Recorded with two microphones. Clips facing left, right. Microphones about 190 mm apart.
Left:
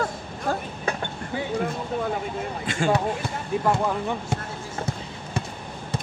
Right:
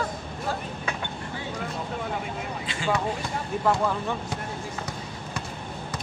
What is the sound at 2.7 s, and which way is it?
Speech, 50° left (ahead or behind).